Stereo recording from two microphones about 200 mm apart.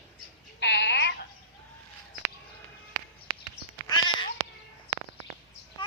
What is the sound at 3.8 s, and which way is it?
Cat, 20° left (ahead or behind).